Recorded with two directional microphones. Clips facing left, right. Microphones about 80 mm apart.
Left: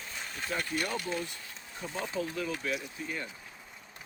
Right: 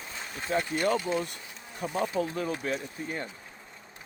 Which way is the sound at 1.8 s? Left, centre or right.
Right.